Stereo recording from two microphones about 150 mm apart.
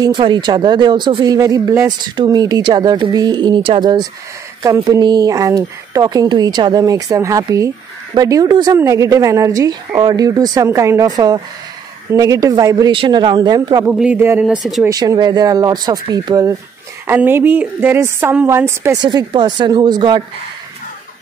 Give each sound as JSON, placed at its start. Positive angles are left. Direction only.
{"t": 0.0, "sound": "speech", "side_deg": -30}
{"t": 12.9, "sound": "speech", "side_deg": -35}
{"t": 13.8, "sound": "a woman's voice", "side_deg": -10}
{"t": 14.4, "sound": "speech", "side_deg": 0}
{"t": 14.9, "sound": "speech", "side_deg": -25}
{"t": 17.0, "sound": "a woman's voice", "side_deg": -15}
{"t": 19.0, "sound": "speech", "side_deg": -30}